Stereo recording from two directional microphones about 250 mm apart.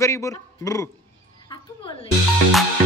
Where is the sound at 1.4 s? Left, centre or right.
Centre.